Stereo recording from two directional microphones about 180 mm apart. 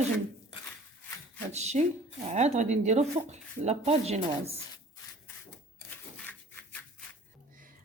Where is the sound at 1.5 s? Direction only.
40° right (ahead or behind).